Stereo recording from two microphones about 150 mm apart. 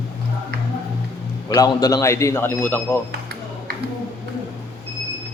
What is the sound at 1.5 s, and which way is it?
A man's voice, 25° left (ahead or behind).